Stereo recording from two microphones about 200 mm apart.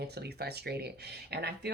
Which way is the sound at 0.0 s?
55° right (ahead or behind).